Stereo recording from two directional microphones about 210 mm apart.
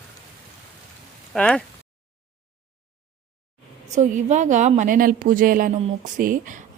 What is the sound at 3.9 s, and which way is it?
A woman's voice, 35° right (ahead or behind).